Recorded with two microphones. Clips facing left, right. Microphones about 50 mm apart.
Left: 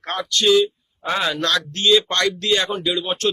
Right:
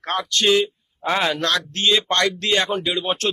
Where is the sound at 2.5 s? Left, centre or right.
Centre.